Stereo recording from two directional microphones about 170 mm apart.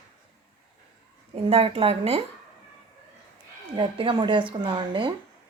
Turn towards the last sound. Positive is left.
turn(degrees=-30)  # may be behind; listen again after turning